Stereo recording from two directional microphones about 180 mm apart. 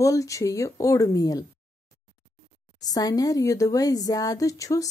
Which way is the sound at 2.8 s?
20° left (ahead or behind).